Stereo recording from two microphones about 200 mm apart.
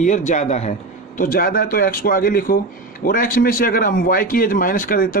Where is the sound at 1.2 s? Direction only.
45° left (ahead or behind).